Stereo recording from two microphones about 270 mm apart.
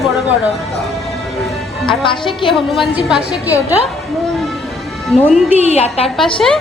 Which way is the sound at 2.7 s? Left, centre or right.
Centre.